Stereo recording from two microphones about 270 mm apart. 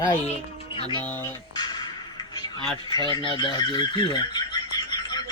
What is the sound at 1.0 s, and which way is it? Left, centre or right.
Speech, centre.